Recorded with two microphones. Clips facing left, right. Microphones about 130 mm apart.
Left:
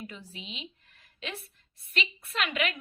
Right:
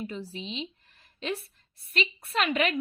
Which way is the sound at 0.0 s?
35° right (ahead or behind).